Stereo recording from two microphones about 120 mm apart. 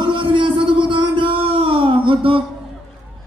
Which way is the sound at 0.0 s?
45° right (ahead or behind).